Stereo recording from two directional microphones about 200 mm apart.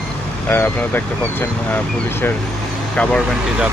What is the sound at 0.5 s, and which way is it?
Speech, 10° left (ahead or behind).